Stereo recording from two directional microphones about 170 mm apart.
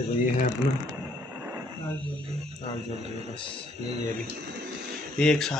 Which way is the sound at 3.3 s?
30° left (ahead or behind).